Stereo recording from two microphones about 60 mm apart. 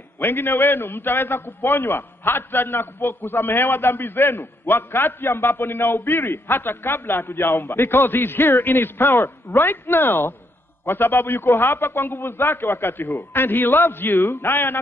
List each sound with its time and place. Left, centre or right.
0.2 s a man's voice: left